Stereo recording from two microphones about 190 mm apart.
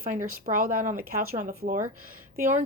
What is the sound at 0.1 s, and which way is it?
Speech, 45° right (ahead or behind).